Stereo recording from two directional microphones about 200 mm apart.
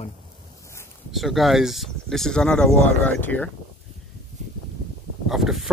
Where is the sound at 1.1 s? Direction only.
Centre (ahead or behind).